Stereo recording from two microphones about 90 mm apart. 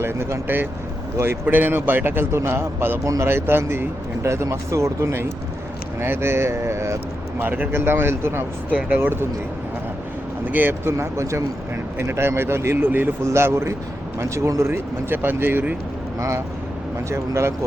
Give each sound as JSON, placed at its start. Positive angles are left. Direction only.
{"t": 0.0, "sound": "speech", "side_deg": -30}
{"t": 10.4, "sound": "speech", "side_deg": -20}
{"t": 17.1, "sound": "speech", "side_deg": -30}